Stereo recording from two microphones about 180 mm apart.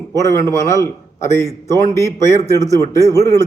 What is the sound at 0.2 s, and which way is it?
A man's voice, 15° left (ahead or behind).